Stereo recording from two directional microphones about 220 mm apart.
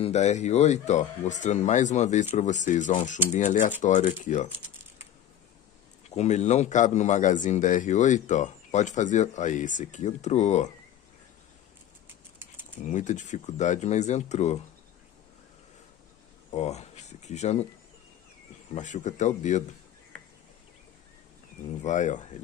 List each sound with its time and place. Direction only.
0.0 s a man's voice: 30° left (ahead or behind)
6.0 s a man's voice: 30° left (ahead or behind)
12.8 s a man's voice: 35° left (ahead or behind)
16.5 s speech: 30° left (ahead or behind)
18.8 s a man's voice: 35° left (ahead or behind)
21.8 s a man's voice: 35° left (ahead or behind)